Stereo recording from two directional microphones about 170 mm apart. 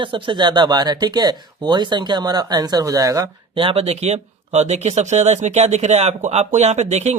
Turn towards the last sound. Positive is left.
turn(degrees=-40)  # may be behind; listen again after turning